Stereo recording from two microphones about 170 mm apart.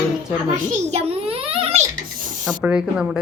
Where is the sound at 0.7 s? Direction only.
40° right (ahead or behind).